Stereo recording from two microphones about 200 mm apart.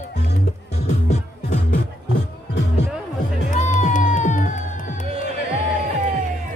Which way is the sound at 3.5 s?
35° left (ahead or behind).